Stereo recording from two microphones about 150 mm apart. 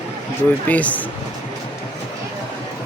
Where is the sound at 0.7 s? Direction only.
10° left (ahead or behind).